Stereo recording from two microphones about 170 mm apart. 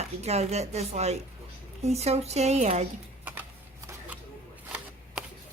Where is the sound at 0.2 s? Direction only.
40° right (ahead or behind).